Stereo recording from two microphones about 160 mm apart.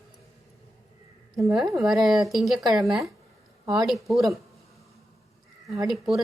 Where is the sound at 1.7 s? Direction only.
Centre (ahead or behind).